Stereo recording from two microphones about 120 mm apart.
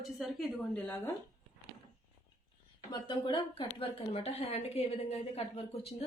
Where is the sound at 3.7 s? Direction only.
50° left (ahead or behind).